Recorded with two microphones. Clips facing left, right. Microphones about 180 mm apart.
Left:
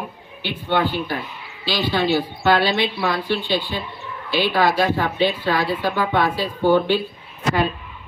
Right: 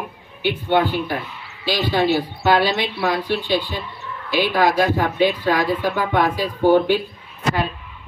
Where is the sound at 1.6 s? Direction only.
45° right (ahead or behind).